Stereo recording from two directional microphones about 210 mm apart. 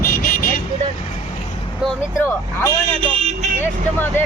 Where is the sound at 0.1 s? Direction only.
45° left (ahead or behind).